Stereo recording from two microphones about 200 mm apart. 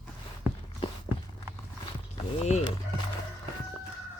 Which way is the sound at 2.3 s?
35° left (ahead or behind).